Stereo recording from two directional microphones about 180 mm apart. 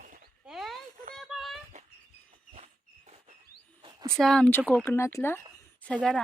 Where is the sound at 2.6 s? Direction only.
40° right (ahead or behind).